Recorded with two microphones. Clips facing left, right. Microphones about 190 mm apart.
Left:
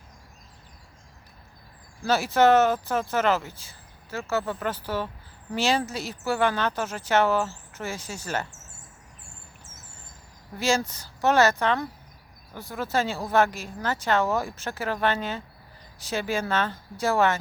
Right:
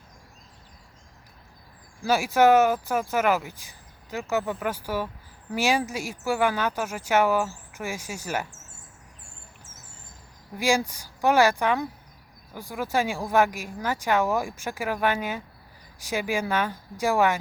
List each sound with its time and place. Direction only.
2.0 s speech: 10° right (ahead or behind)
10.6 s speech: 10° right (ahead or behind)